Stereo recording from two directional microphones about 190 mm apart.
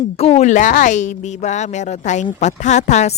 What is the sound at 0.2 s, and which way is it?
Speech, 35° left (ahead or behind).